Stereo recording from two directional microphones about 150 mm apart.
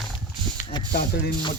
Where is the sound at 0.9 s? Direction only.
90° left.